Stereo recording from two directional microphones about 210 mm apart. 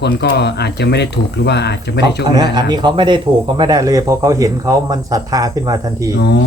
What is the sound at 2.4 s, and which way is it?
Speech, 20° right (ahead or behind).